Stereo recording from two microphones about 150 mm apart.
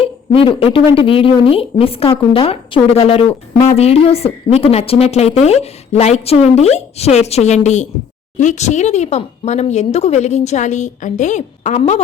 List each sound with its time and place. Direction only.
0.0 s a woman's voice: 35° left (ahead or behind)